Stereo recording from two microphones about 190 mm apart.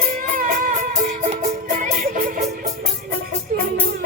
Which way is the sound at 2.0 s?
40° right (ahead or behind).